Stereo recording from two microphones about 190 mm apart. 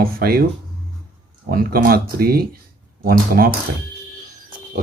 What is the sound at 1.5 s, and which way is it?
Speech, 50° right (ahead or behind).